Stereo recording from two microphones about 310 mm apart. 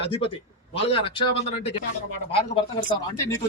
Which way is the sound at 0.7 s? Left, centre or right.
Centre.